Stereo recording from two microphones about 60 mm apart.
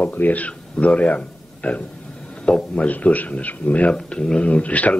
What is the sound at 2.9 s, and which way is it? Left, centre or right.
Speech, left.